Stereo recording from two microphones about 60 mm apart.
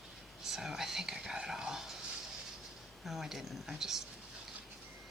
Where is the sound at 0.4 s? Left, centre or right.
Centre.